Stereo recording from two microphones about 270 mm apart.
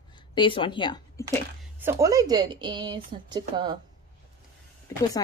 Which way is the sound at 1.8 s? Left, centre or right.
Centre.